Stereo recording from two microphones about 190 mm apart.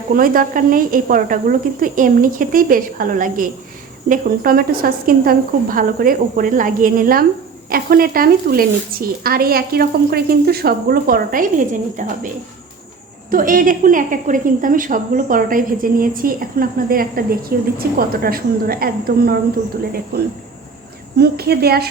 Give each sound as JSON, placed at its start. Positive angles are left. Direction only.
{"t": 0.1, "sound": "speech", "side_deg": -45}
{"t": 13.3, "sound": "speech", "side_deg": -45}
{"t": 21.2, "sound": "speech", "side_deg": -55}